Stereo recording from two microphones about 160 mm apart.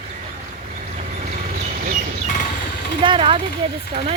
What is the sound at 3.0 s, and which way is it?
Speech, 30° right (ahead or behind).